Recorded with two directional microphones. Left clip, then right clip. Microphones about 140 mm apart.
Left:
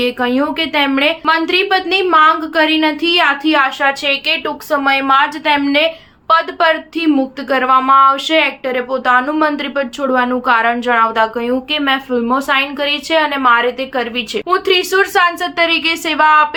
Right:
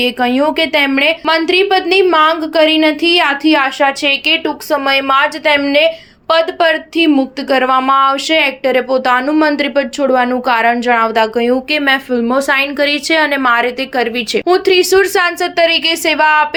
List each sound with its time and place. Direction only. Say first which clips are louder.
0.0 s speech: right 3 dB; 30° right (ahead or behind)